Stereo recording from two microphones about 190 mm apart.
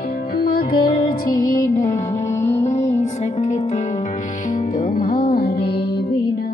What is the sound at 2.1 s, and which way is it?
Music, 35° left (ahead or behind).